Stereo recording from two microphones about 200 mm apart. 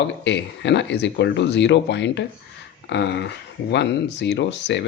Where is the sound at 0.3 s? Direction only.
60° left (ahead or behind).